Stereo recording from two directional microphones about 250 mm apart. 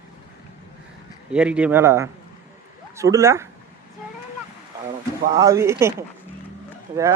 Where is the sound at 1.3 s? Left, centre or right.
Centre.